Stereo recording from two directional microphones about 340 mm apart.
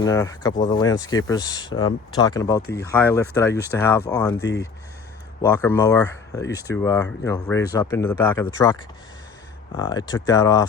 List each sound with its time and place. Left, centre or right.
0.0 s speech: centre
4.4 s speech: left
5.4 s speech: centre